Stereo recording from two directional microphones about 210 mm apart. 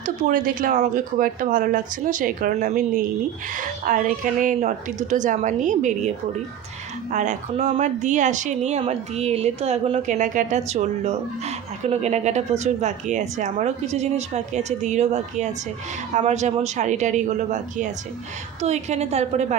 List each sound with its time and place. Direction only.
0.0 s speech: 40° right (ahead or behind)